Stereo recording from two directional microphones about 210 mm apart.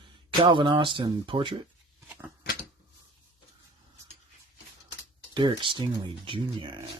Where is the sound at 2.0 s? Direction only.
10° right (ahead or behind).